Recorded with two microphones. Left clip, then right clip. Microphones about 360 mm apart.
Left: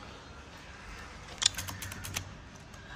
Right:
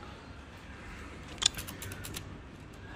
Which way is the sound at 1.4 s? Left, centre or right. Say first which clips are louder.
Even; centre.